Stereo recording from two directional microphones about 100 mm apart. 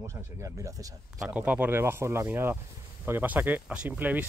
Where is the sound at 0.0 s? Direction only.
30° right (ahead or behind).